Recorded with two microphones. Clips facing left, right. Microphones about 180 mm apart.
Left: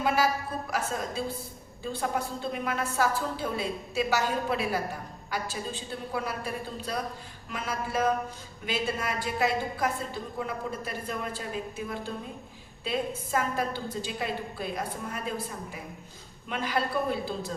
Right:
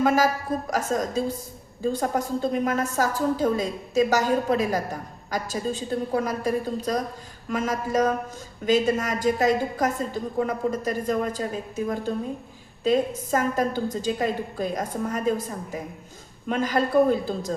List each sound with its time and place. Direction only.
0.0 s a woman's voice: 45° right (ahead or behind)
12.8 s a woman's voice: 40° right (ahead or behind)